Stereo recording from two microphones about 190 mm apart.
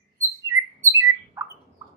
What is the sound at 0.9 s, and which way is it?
Bird, 15° right (ahead or behind).